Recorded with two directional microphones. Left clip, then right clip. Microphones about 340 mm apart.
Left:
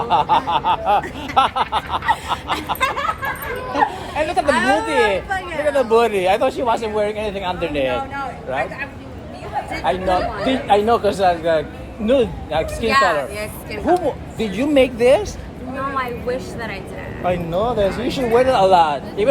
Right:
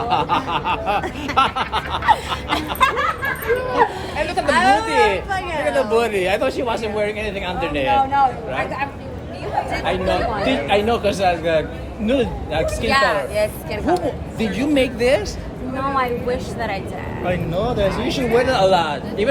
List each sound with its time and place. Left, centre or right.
0.1 s speech: centre
2.7 s a sound: centre
3.7 s speech: centre
4.4 s speech: centre
5.7 s speech: centre
7.9 s speech: centre
10.4 s speech: centre
12.9 s speech: centre
14.3 s speech: centre
15.8 s speech: centre
17.2 s speech: centre